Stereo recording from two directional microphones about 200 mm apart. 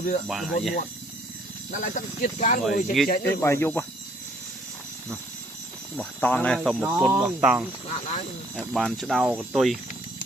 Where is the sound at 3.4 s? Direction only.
10° left (ahead or behind).